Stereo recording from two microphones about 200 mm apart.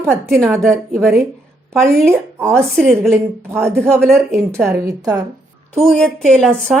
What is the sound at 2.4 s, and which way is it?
Speech, 5° left (ahead or behind).